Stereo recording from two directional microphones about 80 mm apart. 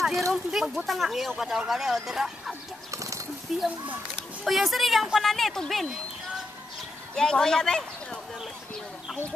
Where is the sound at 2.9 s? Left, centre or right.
Right.